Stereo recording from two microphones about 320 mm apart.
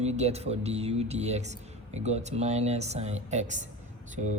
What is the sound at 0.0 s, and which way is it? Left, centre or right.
Speech, centre.